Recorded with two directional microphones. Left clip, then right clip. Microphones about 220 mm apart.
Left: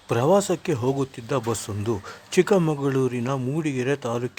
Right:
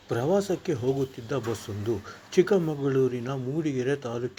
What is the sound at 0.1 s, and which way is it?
A man's voice, 25° left (ahead or behind).